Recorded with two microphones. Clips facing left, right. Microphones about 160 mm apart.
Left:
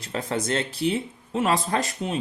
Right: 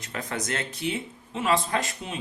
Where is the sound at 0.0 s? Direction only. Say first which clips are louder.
Left 5 dB; 30° left (ahead or behind).